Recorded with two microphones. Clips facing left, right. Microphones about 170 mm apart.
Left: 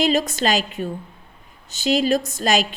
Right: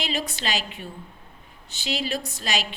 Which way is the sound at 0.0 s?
45° left (ahead or behind).